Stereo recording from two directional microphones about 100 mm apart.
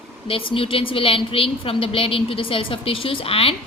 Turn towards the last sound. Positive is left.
turn(degrees=70)  # may be behind; listen again after turning